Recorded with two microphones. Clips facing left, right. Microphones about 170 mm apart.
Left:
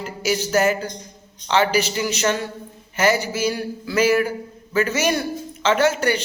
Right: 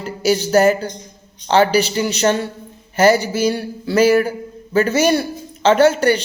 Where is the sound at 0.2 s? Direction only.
35° right (ahead or behind).